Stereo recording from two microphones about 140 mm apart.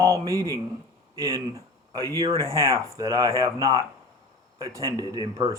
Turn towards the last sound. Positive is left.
turn(degrees=-25)  # may be behind; listen again after turning